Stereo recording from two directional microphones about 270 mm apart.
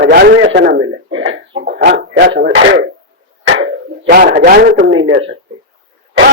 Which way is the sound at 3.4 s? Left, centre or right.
Right.